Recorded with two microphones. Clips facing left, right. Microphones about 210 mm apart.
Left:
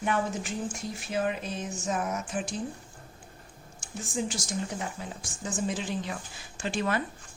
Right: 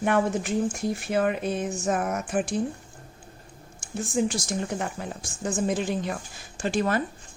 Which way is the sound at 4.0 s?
60° right (ahead or behind).